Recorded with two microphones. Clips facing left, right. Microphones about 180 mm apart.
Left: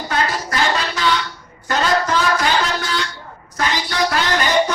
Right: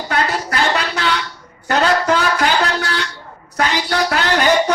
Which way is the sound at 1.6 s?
65° right (ahead or behind).